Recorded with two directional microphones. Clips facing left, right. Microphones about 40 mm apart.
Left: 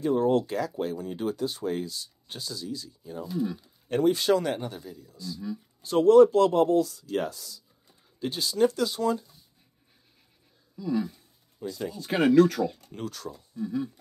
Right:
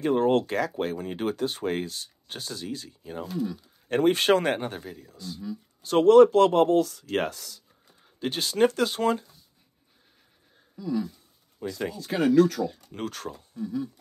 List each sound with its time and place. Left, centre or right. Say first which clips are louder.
0.0 s speech: right 1 dB; right
10.9 s speech: left 1 dB; centre
11.6 s speech: right 2 dB; right
12.0 s speech: left 1 dB; left
12.9 s speech: right 2 dB; right
13.7 s speech: left 1 dB; left